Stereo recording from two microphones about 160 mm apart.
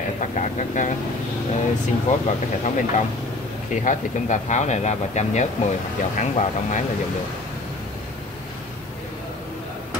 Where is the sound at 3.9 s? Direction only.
50° left (ahead or behind).